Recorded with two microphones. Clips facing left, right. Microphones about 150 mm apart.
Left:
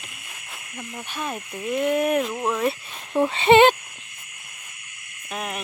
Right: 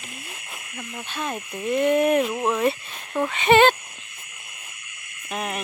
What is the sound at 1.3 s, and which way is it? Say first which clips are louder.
Speech: right 3 dB; centre (ahead or behind).